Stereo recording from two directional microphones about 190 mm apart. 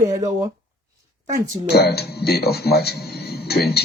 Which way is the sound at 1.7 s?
60° left (ahead or behind).